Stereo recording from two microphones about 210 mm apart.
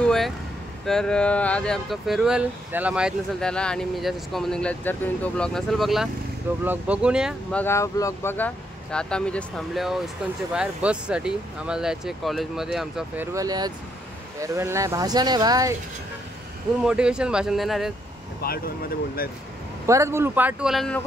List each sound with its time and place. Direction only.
0.0 s vehicle: centre (ahead or behind)
0.8 s speech: 5° left (ahead or behind)
7.6 s speech: 15° left (ahead or behind); by 15.7 s 20° right (ahead or behind)
16.8 s speech: 5° right (ahead or behind)
18.4 s speech: 45° left (ahead or behind)
19.9 s speech: 15° right (ahead or behind)